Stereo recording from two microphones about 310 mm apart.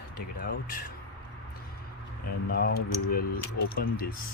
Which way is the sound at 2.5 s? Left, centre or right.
Left.